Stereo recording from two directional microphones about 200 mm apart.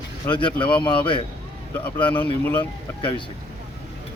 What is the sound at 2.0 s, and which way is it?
Speech, 10° left (ahead or behind).